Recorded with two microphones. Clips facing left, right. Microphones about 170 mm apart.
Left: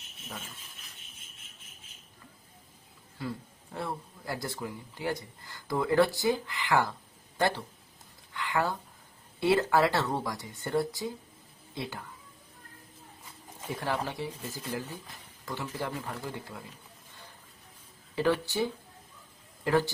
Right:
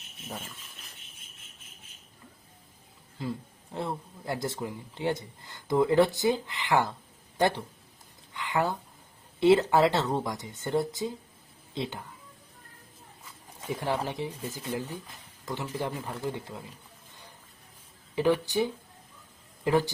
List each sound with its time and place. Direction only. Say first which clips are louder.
3.2 s speech: right 2 dB; 20° right (ahead or behind)
8.3 s a sound: right 2 dB; 20° right (ahead or behind)
9.4 s speech: right 4 dB; 20° right (ahead or behind)
13.7 s speech: right 2 dB; 20° right (ahead or behind)
18.1 s speech: right 3 dB; 15° right (ahead or behind)